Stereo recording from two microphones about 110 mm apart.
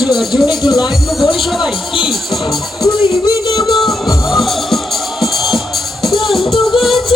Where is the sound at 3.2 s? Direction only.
35° left (ahead or behind).